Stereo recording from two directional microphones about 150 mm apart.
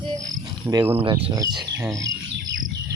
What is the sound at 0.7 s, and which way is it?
Speech, 20° right (ahead or behind).